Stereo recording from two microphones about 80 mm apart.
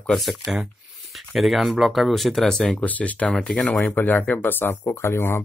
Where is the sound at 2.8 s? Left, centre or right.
Centre.